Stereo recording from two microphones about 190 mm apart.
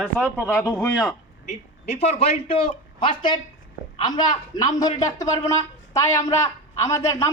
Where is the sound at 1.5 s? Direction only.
35° left (ahead or behind).